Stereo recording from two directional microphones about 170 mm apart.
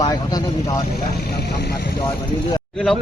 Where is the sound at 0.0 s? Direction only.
25° left (ahead or behind).